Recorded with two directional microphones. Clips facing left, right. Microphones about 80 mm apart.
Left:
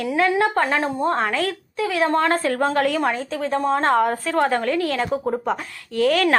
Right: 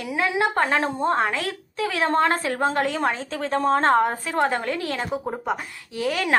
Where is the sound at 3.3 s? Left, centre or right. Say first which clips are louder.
Even; right.